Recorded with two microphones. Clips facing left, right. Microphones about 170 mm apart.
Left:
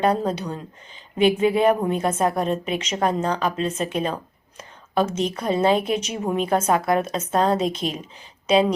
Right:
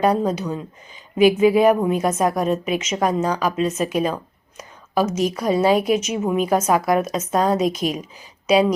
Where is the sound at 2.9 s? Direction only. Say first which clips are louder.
Right 1 dB; 5° right (ahead or behind).